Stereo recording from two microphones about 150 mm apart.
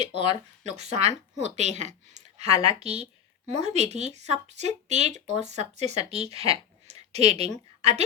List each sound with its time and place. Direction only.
0.6 s speech: 45° right (ahead or behind)